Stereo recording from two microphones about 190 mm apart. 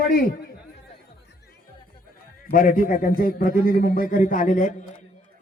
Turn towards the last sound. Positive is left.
turn(degrees=45)  # may be behind; listen again after turning